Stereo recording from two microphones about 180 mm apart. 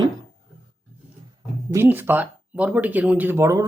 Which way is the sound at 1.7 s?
10° right (ahead or behind).